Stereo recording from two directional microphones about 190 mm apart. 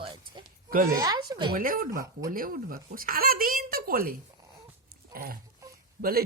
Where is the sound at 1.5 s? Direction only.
50° right (ahead or behind).